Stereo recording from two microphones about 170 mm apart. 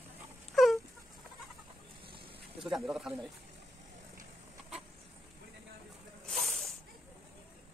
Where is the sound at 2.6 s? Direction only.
Centre (ahead or behind).